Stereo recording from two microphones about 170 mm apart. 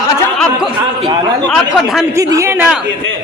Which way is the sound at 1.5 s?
Centre (ahead or behind).